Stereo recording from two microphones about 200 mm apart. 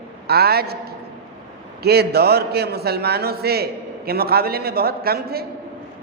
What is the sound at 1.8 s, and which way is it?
A man's voice, 55° right (ahead or behind).